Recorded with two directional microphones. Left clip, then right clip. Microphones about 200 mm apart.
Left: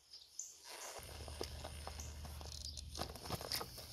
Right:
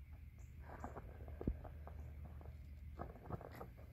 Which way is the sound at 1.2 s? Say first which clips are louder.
Left 1 dB; 35° left (ahead or behind).